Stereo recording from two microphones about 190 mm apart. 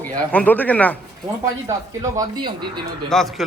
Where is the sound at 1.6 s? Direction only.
15° right (ahead or behind).